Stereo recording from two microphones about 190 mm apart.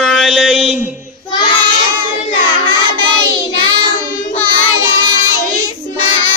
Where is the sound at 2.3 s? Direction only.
25° left (ahead or behind).